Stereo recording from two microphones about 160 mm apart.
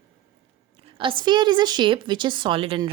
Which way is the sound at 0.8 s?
30° right (ahead or behind).